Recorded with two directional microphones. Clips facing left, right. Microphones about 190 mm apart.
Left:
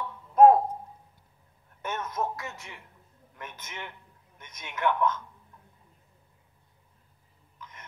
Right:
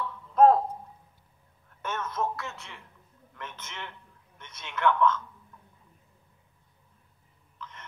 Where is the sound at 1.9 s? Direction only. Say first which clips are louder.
Even; 15° left (ahead or behind).